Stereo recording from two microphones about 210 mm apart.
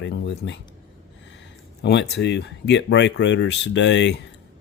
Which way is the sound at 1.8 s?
55° left (ahead or behind).